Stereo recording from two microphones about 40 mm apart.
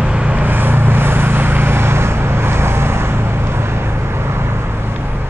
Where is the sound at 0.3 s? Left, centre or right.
Right.